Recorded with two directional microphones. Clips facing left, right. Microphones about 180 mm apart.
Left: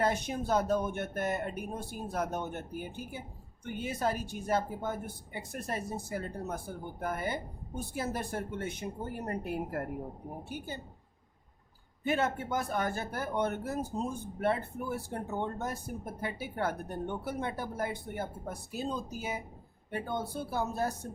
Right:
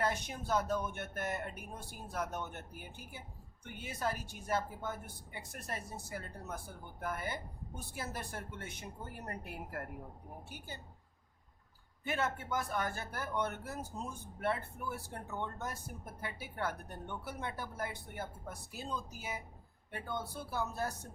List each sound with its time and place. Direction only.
0.0 s speech: 20° left (ahead or behind)
12.0 s speech: 20° left (ahead or behind)